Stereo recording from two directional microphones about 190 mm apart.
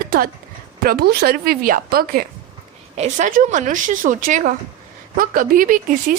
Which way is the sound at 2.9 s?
35° right (ahead or behind).